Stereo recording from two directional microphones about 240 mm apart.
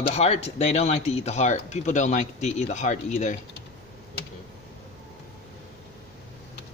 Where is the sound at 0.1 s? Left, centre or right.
Left.